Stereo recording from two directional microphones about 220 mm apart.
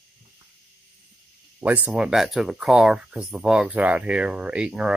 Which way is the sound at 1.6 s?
5° right (ahead or behind).